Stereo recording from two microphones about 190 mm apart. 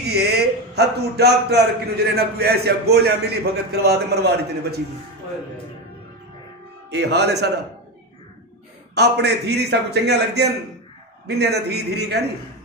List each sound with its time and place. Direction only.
0.0 s a man's voice: 60° right (ahead or behind)
6.9 s a man's voice: 60° right (ahead or behind)
8.9 s a man's voice: 60° right (ahead or behind)